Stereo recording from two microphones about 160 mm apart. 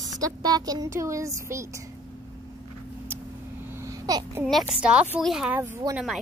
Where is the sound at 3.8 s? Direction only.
25° right (ahead or behind).